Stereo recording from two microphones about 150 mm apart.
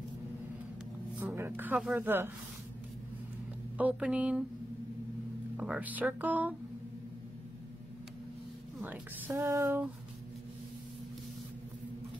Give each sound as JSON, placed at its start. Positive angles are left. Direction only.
{"t": 1.2, "sound": "a woman's voice", "side_deg": -15}
{"t": 3.7, "sound": "a woman's voice", "side_deg": -10}
{"t": 5.6, "sound": "a woman's voice", "side_deg": -10}
{"t": 8.8, "sound": "a woman's voice", "side_deg": -10}